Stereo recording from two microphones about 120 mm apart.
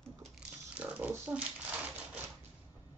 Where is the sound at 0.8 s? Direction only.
10° right (ahead or behind).